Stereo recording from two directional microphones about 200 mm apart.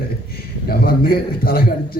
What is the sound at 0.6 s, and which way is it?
A man's voice, 50° left (ahead or behind).